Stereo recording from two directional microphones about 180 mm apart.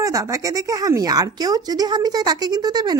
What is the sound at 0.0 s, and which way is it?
A woman's voice, 20° right (ahead or behind).